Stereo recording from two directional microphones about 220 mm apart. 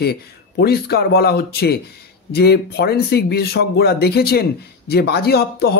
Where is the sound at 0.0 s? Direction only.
45° left (ahead or behind).